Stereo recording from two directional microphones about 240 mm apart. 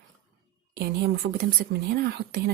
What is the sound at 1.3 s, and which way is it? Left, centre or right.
A woman's voice, right.